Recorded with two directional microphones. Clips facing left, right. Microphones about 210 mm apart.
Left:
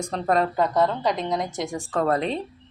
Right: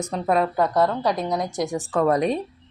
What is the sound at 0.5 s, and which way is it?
Speech, 20° left (ahead or behind).